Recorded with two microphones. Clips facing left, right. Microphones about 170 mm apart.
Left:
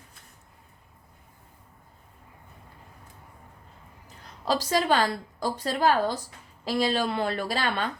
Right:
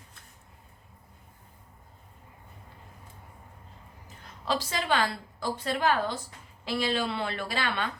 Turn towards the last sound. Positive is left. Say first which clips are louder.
# left 3 dB
turn(degrees=40)  # may be behind; listen again after turning